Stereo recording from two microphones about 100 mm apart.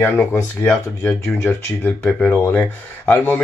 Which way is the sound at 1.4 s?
20° left (ahead or behind).